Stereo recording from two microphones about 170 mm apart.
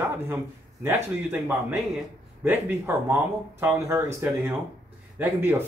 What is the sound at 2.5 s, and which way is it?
Speech, 10° right (ahead or behind).